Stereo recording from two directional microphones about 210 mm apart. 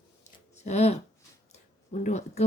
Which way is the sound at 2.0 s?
35° left (ahead or behind).